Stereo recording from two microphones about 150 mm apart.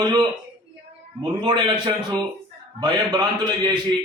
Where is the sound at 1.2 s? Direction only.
30° right (ahead or behind).